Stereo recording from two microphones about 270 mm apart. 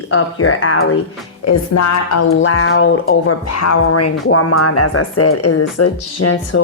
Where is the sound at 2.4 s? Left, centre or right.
Left.